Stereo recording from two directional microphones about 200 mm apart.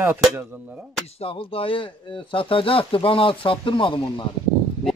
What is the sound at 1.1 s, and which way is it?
Speech, 30° left (ahead or behind).